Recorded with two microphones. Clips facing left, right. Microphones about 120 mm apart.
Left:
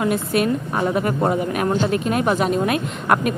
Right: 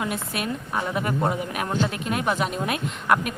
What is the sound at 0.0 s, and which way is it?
A woman's voice, 50° left (ahead or behind).